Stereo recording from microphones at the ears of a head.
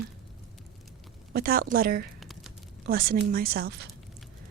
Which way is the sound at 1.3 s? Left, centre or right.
Right.